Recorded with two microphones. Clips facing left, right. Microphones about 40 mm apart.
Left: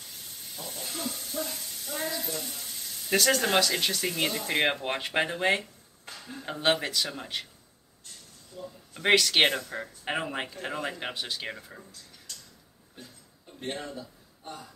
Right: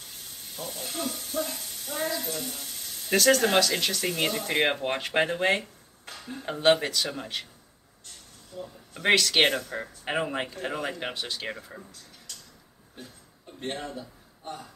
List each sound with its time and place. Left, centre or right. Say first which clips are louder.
0.2 s hiss: right 4 dB; centre
1.3 s speech: right 3 dB; centre
8.5 s speech: right 2 dB; right
8.9 s speech: even; centre
12.9 s a sound: right 3 dB; centre